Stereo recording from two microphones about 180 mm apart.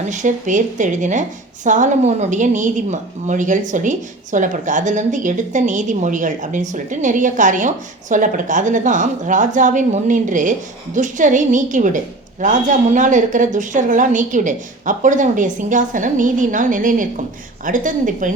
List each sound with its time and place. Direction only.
0.1 s a woman's voice: 45° right (ahead or behind)